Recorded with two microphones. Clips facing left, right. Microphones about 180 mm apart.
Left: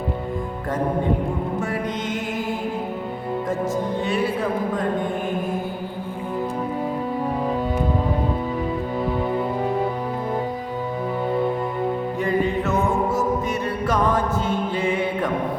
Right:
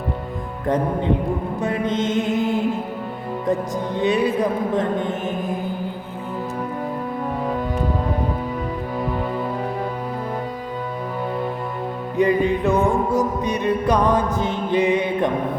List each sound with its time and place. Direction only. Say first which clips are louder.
1.6 s speech: right 4 dB; 25° right (ahead or behind)
4.0 s speech: right 8 dB; 20° right (ahead or behind)
12.2 s music: right 6 dB; 15° right (ahead or behind)